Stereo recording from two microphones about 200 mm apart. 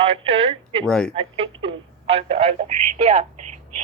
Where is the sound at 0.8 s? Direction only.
5° left (ahead or behind).